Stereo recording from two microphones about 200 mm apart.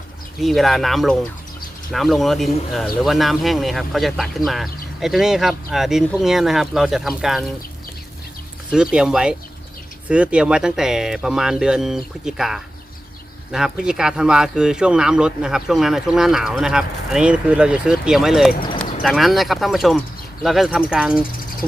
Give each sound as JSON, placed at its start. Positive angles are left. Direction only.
{"t": 0.3, "sound": "speech", "side_deg": 0}
{"t": 8.7, "sound": "speech", "side_deg": -5}